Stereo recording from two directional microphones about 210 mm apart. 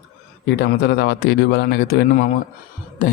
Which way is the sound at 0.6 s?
55° left (ahead or behind).